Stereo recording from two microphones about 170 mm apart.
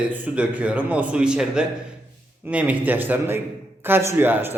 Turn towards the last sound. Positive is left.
turn(degrees=-10)  # may be behind; listen again after turning